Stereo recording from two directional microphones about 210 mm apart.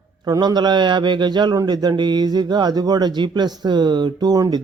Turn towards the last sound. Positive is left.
turn(degrees=-20)  # may be behind; listen again after turning